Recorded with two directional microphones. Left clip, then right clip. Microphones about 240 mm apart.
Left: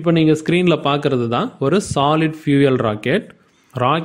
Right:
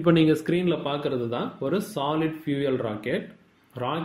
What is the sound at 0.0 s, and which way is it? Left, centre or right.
Speech, left.